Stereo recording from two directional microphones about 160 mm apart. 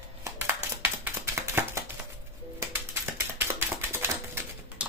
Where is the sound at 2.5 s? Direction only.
15° right (ahead or behind).